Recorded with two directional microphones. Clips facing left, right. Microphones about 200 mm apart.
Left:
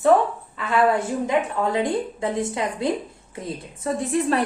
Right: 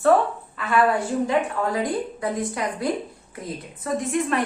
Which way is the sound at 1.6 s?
25° left (ahead or behind).